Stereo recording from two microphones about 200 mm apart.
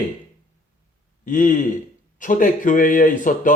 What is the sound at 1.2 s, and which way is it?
A man's voice, 40° left (ahead or behind).